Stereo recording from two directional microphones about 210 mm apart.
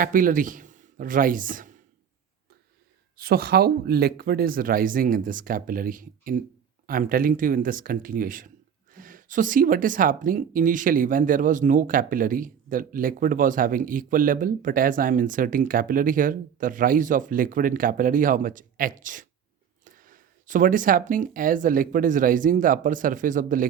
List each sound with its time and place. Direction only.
0.0 s speech: 40° right (ahead or behind)
3.2 s speech: 45° right (ahead or behind)